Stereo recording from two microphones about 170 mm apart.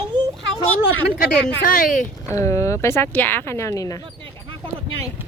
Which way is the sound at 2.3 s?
20° left (ahead or behind).